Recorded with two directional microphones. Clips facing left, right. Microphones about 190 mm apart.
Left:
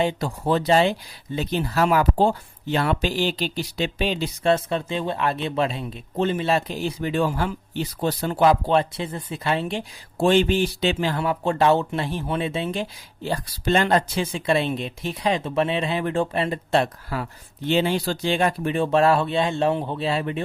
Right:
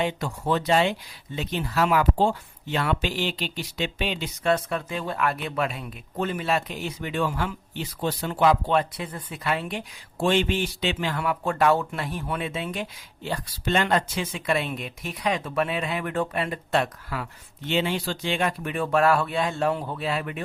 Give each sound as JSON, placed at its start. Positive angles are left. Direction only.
{"t": 0.0, "sound": "speech", "side_deg": 30}